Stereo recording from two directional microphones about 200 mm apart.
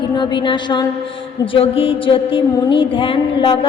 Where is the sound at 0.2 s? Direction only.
25° left (ahead or behind).